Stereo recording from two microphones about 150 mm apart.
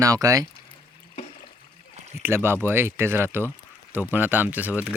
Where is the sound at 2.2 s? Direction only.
15° right (ahead or behind).